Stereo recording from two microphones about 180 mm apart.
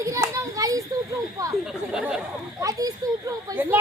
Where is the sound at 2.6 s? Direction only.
20° right (ahead or behind).